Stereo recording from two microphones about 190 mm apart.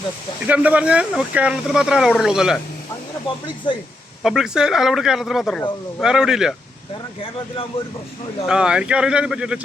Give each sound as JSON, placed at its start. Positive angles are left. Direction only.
{"t": 0.4, "sound": "speech", "side_deg": -5}
{"t": 3.6, "sound": "speech", "side_deg": 25}
{"t": 4.2, "sound": "speech", "side_deg": 0}
{"t": 8.4, "sound": "speech", "side_deg": -5}